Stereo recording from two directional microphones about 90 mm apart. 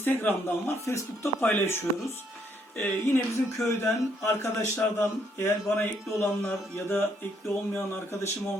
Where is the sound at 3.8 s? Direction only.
30° left (ahead or behind).